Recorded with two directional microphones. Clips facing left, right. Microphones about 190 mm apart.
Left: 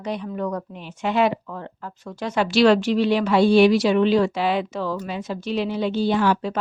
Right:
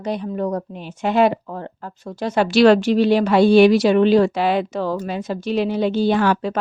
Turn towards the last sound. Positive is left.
turn(degrees=-65)  # may be behind; listen again after turning